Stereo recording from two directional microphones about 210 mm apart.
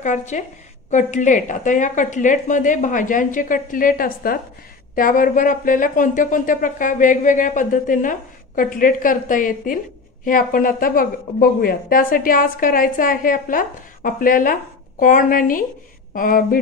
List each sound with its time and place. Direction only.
0.0 s a woman's voice: 35° left (ahead or behind)